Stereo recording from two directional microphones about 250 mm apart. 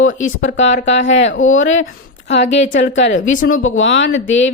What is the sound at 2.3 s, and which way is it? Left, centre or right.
A woman's voice, left.